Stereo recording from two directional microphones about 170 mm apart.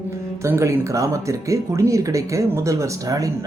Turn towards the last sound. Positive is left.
turn(degrees=-20)  # may be behind; listen again after turning